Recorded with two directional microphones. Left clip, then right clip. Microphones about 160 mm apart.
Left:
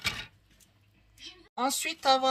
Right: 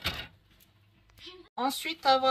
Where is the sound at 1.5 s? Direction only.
30° left (ahead or behind).